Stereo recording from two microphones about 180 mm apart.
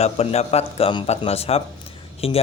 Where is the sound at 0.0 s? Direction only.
35° left (ahead or behind).